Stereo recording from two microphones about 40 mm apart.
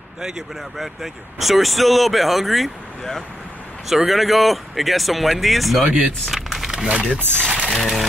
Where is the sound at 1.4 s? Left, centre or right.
Centre.